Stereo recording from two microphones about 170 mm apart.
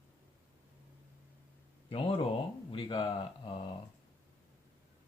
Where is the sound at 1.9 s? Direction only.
30° left (ahead or behind).